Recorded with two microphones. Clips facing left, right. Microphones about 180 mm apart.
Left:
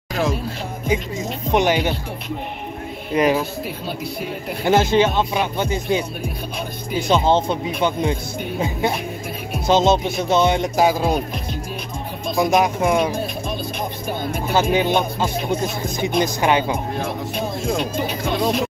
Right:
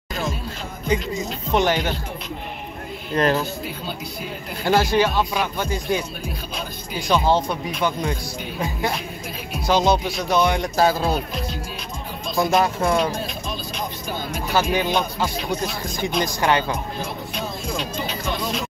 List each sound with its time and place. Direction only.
1.5 s speech: 15° left (ahead or behind)
3.1 s speech: 10° left (ahead or behind)
4.6 s speech: 20° left (ahead or behind)
12.4 s speech: 15° left (ahead or behind)
14.5 s speech: 20° left (ahead or behind)
17.0 s speech: 55° left (ahead or behind)